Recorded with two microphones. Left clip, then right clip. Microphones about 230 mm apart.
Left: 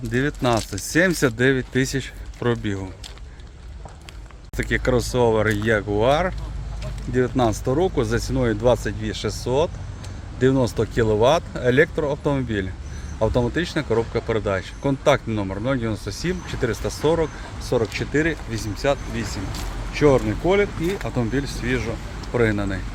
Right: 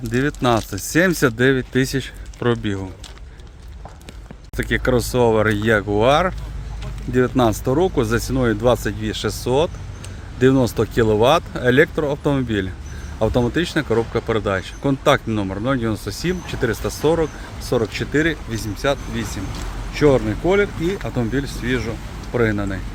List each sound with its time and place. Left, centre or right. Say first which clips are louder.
0.1 s speech: right 3 dB; centre
4.5 s speech: right 2 dB; centre